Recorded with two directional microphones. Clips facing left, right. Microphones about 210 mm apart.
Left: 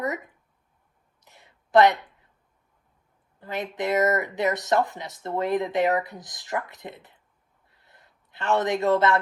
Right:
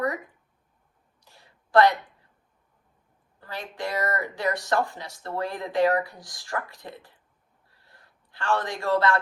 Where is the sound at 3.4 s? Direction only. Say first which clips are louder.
Left 5 dB; 20° left (ahead or behind).